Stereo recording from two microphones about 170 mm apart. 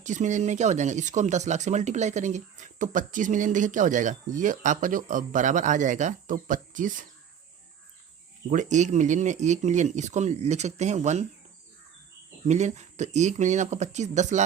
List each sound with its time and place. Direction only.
0.0 s speech: 45° right (ahead or behind)
8.4 s speech: 45° right (ahead or behind)
12.5 s speech: 40° right (ahead or behind)